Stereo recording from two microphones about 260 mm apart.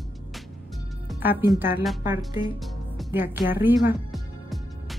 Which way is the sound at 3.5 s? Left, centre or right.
Centre.